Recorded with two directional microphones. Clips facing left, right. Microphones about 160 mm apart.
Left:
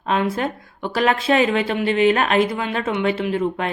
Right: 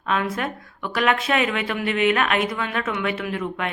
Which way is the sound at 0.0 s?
30° left (ahead or behind).